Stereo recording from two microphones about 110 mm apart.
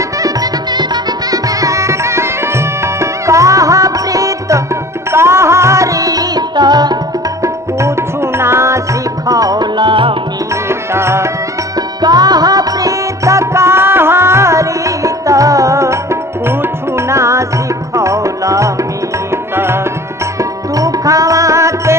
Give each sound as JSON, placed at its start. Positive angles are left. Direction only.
{"t": 0.2, "sound": "music", "side_deg": -35}
{"t": 7.4, "sound": "music", "side_deg": -25}
{"t": 10.7, "sound": "music", "side_deg": -25}
{"t": 12.0, "sound": "music", "side_deg": -35}